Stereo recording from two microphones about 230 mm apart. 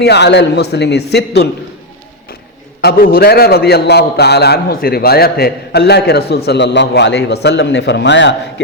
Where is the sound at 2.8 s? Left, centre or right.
Left.